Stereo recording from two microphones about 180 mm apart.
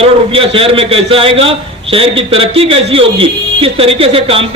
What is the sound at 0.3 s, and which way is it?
A man's voice, 30° right (ahead or behind).